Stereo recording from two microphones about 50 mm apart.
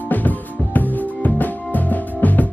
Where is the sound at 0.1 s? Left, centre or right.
Left.